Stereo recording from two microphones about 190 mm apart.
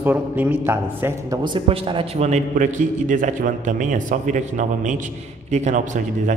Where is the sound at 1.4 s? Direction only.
25° right (ahead or behind).